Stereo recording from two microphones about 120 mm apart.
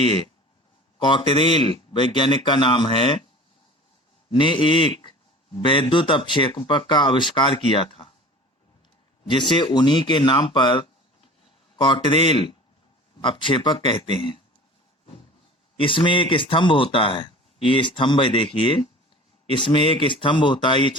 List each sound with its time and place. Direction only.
0.9 s a man's voice: 40° left (ahead or behind)
4.3 s a man's voice: 45° left (ahead or behind)
9.5 s a man's voice: 40° left (ahead or behind)
15.8 s a man's voice: 45° left (ahead or behind)